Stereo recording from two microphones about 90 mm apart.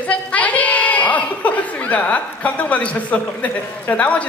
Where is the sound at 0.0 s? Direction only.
15° left (ahead or behind).